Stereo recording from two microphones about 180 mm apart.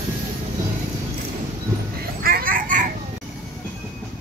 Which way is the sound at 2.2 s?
55° right (ahead or behind).